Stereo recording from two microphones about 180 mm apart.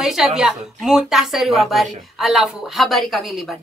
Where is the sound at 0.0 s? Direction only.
Centre (ahead or behind).